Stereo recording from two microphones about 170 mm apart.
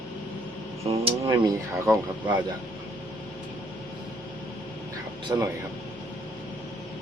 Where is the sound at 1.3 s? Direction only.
20° right (ahead or behind).